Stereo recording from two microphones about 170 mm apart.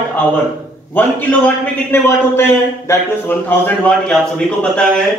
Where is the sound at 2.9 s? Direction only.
10° left (ahead or behind).